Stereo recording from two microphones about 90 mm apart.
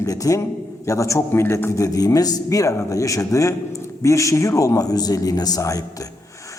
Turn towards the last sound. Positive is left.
turn(degrees=40)  # may be behind; listen again after turning